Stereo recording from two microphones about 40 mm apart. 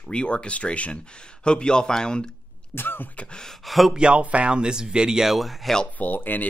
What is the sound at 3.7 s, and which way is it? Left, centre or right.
Speech, centre.